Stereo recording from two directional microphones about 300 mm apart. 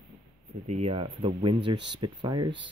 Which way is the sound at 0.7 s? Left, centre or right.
Centre.